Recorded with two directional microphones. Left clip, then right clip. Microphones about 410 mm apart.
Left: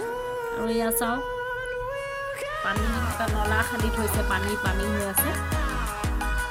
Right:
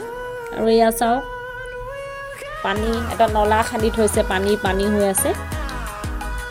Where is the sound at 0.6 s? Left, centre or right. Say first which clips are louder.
Right 12 dB; left.